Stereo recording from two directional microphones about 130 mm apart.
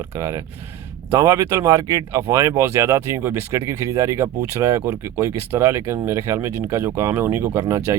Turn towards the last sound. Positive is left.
turn(degrees=-25)  # may be behind; listen again after turning